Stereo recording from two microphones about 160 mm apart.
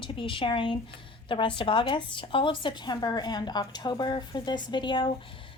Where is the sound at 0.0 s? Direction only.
30° left (ahead or behind).